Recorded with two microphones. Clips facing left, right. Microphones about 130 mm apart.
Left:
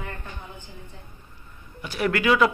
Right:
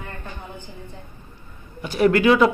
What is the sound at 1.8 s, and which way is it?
Speech, 30° right (ahead or behind).